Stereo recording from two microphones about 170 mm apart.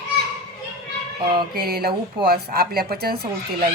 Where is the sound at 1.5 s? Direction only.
65° right (ahead or behind).